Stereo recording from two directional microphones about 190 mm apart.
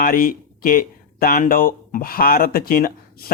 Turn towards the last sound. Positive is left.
turn(degrees=50)  # may be behind; listen again after turning